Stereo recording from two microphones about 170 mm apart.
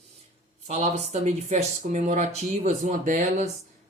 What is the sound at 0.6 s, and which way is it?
Speech, 40° right (ahead or behind).